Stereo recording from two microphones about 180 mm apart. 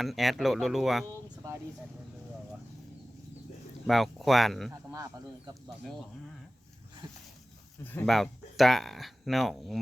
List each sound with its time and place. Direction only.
0.0 s speech: centre (ahead or behind)
3.8 s speech: centre (ahead or behind)
7.0 s a sound: 25° right (ahead or behind)
7.9 s speech: 10° left (ahead or behind)
8.1 s speech: centre (ahead or behind)